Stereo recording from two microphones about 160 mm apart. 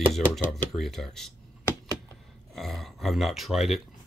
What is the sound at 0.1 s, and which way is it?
Speech, 5° left (ahead or behind).